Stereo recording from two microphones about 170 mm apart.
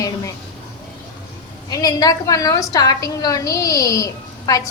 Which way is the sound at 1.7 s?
20° left (ahead or behind).